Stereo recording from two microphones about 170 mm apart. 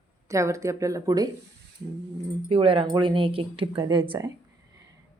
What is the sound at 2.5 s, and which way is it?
Speech, 30° right (ahead or behind).